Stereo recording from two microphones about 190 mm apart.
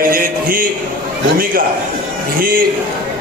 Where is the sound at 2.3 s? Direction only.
50° right (ahead or behind).